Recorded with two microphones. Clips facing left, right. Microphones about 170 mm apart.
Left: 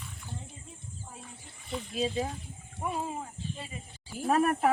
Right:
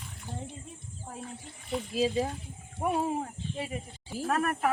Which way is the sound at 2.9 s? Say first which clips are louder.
Right 5 dB; 65° right (ahead or behind).